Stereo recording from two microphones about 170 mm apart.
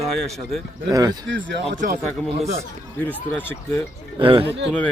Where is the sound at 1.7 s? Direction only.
55° right (ahead or behind).